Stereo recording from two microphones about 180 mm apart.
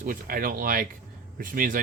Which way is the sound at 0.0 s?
55° right (ahead or behind).